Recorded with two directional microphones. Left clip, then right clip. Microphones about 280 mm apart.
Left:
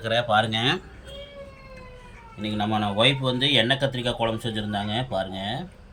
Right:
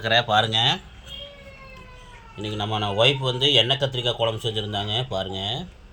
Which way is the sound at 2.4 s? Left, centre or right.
Right.